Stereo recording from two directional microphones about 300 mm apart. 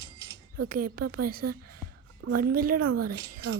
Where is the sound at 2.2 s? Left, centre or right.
Right.